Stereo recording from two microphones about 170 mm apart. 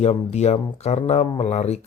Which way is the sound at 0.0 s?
40° left (ahead or behind).